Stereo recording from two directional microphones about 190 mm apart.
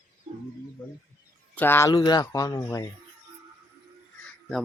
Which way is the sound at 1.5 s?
10° left (ahead or behind).